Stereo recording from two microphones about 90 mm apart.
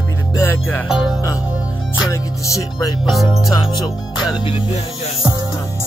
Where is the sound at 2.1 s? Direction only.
35° left (ahead or behind).